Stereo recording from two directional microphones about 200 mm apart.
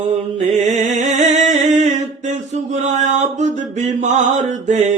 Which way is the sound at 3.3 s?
35° right (ahead or behind).